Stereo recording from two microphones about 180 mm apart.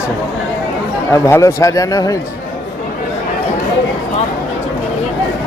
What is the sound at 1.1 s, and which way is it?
Speech, 15° left (ahead or behind).